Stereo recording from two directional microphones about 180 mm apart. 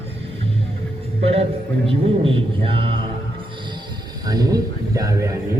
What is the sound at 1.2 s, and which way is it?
Speech, 35° right (ahead or behind).